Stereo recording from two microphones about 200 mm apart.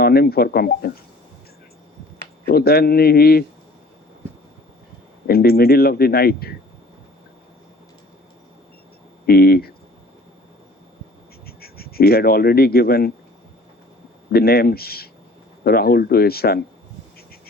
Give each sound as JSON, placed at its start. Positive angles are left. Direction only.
{"t": 0.0, "sound": "speech", "side_deg": 50}
{"t": 2.5, "sound": "speech", "side_deg": 50}
{"t": 5.3, "sound": "speech", "side_deg": 50}
{"t": 9.2, "sound": "speech", "side_deg": 50}
{"t": 11.4, "sound": "speech", "side_deg": 50}
{"t": 14.3, "sound": "speech", "side_deg": 50}